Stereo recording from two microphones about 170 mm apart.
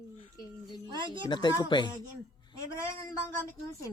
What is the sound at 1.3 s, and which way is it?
Speech, 25° left (ahead or behind).